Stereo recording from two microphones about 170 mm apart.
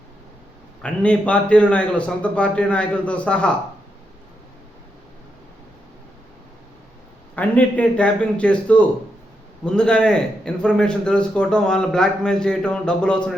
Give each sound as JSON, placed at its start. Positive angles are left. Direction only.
{"t": 0.8, "sound": "a man's voice", "side_deg": 5}
{"t": 7.3, "sound": "a man's voice", "side_deg": 10}